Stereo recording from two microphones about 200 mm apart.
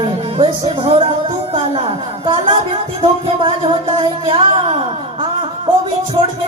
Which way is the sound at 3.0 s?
25° right (ahead or behind).